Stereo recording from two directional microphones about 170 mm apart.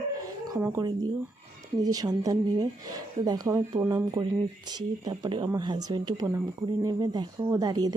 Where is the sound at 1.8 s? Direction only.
20° right (ahead or behind).